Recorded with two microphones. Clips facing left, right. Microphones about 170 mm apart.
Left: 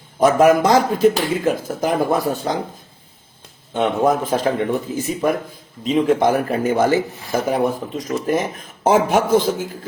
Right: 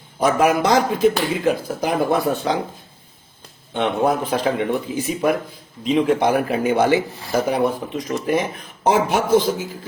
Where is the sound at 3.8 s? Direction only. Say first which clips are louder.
Left 2 dB; 45° left (ahead or behind).